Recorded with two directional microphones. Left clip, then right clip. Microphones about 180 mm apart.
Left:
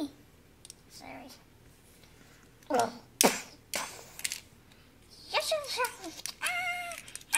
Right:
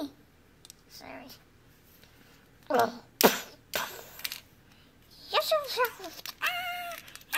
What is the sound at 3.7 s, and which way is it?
Crushing, 30° right (ahead or behind).